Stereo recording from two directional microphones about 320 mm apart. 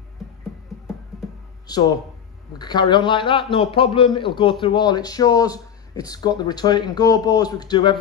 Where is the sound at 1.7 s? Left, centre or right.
Centre.